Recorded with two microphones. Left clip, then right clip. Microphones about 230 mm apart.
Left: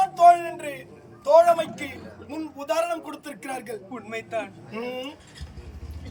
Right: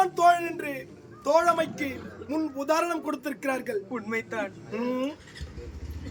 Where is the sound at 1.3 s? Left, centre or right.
Centre.